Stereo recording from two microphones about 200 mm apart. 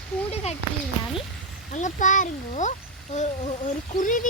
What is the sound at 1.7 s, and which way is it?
Speech, 40° left (ahead or behind).